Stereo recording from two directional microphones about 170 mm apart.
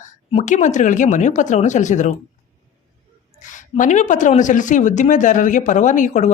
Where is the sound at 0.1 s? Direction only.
45° left (ahead or behind).